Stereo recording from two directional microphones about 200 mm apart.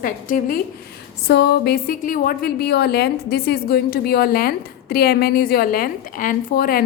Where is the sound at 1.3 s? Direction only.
55° left (ahead or behind).